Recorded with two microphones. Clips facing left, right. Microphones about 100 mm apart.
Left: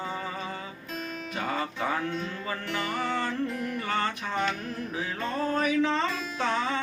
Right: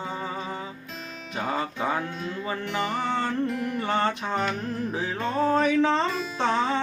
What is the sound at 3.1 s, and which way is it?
Music, 25° right (ahead or behind).